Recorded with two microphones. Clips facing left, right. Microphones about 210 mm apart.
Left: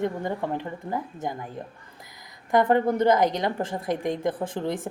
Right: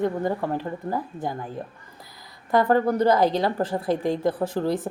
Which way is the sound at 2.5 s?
20° left (ahead or behind).